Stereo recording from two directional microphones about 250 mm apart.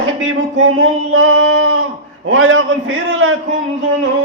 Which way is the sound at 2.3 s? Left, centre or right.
Right.